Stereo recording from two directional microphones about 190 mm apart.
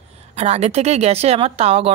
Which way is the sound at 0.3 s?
35° right (ahead or behind).